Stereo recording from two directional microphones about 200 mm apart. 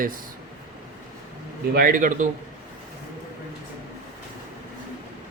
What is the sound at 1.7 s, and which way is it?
Speech, 45° right (ahead or behind).